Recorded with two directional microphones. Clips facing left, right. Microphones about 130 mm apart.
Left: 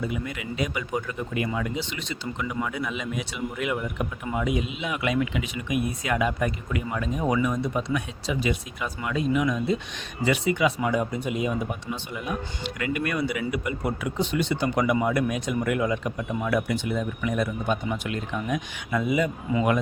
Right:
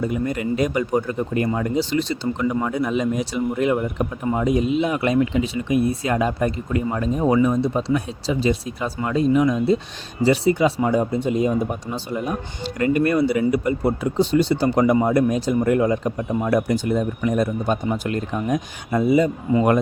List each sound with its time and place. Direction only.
0.0 s speech: 45° right (ahead or behind)